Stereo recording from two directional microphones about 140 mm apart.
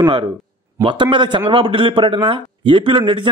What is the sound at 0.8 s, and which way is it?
A man's voice, 35° right (ahead or behind).